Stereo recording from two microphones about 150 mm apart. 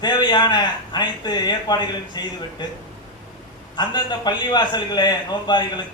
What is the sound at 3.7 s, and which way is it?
A man's voice, 30° left (ahead or behind).